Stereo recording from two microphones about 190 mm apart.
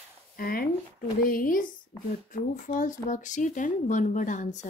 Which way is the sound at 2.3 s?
40° left (ahead or behind).